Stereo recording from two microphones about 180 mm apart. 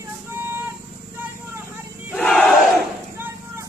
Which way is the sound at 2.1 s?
5° left (ahead or behind).